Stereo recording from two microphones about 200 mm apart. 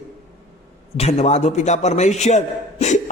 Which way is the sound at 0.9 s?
30° left (ahead or behind).